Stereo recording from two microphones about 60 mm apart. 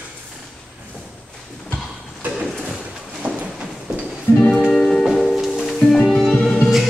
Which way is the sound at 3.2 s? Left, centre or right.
Centre.